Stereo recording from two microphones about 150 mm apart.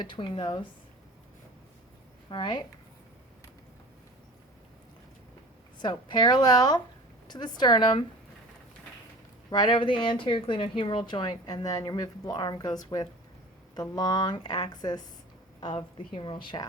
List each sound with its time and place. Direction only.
0.0 s a woman's voice: 30° left (ahead or behind)
2.3 s speech: 30° left (ahead or behind)
5.8 s speech: 30° left (ahead or behind)
9.5 s a woman's voice: 30° left (ahead or behind)